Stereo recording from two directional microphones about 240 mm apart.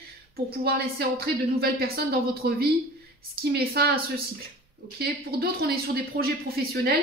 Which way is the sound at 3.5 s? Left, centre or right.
Right.